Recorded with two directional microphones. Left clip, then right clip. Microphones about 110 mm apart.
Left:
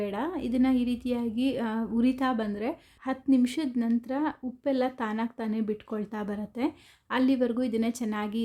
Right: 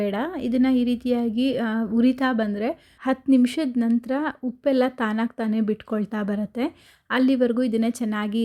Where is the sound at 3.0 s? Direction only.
50° right (ahead or behind).